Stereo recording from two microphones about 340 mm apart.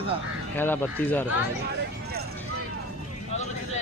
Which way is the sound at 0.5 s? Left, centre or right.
Centre.